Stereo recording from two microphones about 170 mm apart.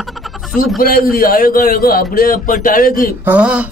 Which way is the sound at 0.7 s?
60° left (ahead or behind).